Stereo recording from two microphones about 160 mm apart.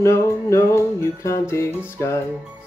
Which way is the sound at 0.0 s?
15° left (ahead or behind).